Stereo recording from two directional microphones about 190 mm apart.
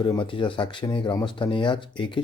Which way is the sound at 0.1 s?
25° left (ahead or behind).